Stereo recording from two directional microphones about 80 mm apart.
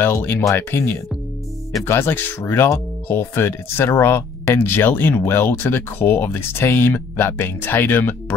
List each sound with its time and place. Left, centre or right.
0.0 s speech: left